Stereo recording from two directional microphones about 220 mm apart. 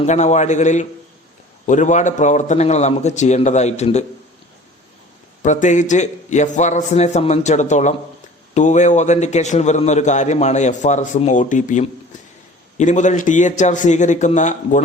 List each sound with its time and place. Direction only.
0.0 s a man's voice: 30° left (ahead or behind)
5.4 s a man's voice: 35° left (ahead or behind)